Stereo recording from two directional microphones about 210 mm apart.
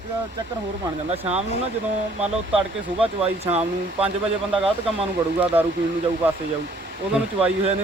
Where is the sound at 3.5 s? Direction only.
30° right (ahead or behind).